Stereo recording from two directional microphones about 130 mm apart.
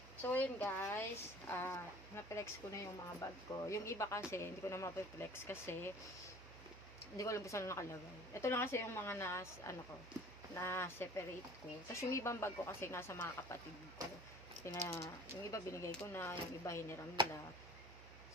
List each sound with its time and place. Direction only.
0.3 s speech: 15° left (ahead or behind)
7.2 s speech: 25° left (ahead or behind)
14.6 s speech: 20° left (ahead or behind)